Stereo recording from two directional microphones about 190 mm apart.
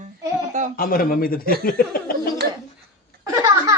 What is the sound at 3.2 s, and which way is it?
Baby laughter, 15° right (ahead or behind).